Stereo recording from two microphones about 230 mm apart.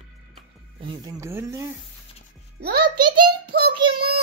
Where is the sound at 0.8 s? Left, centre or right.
Centre.